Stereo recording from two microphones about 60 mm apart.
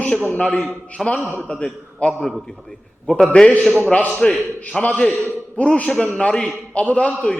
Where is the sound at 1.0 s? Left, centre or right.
Centre.